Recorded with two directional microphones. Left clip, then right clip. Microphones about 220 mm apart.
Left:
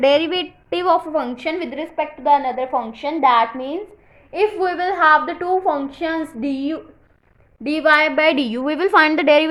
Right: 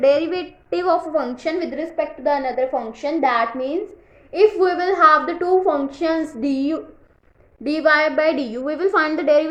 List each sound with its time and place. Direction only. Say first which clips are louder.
0.0 s a woman's voice: left 1 dB; 30° left (ahead or behind)